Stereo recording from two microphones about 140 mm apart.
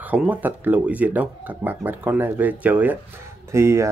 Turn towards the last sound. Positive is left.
turn(degrees=-20)  # may be behind; listen again after turning